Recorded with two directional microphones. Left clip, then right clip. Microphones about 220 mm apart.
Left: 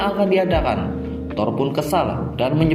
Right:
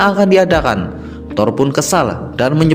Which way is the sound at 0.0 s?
50° right (ahead or behind).